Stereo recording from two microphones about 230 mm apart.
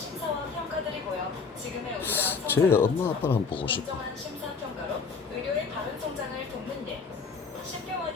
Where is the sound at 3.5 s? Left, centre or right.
Left.